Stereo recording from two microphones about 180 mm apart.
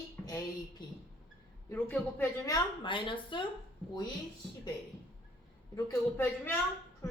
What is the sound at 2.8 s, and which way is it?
Speech, 25° left (ahead or behind).